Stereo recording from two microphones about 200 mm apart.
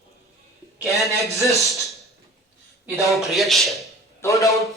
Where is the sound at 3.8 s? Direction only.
15° left (ahead or behind).